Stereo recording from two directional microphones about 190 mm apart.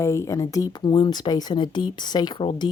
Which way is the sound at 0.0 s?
15° left (ahead or behind).